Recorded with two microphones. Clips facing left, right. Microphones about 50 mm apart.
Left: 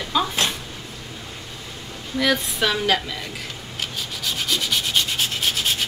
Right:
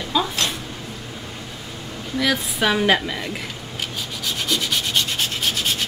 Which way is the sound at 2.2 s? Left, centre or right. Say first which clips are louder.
Even; centre.